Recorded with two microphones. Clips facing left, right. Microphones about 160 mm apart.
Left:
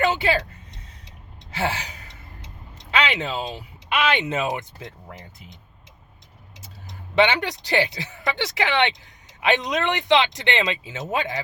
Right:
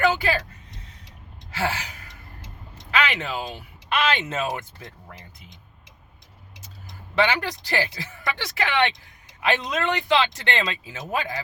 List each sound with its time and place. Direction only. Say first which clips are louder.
0.0 s speech: left 1 dB; 25° left (ahead or behind)
1.5 s gasp: left 1 dB; 20° left (ahead or behind)
2.9 s quack: left 1 dB; 20° left (ahead or behind)
3.9 s speech: left 2 dB; 15° left (ahead or behind)
7.2 s speech: left 3 dB; 20° left (ahead or behind)